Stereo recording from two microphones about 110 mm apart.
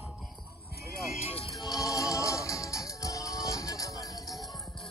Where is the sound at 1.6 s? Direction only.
35° left (ahead or behind).